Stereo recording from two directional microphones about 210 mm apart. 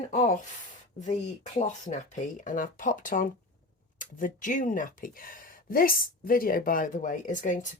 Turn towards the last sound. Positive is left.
turn(degrees=40)  # may be behind; listen again after turning